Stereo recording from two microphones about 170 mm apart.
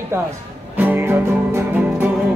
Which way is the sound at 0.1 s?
15° right (ahead or behind).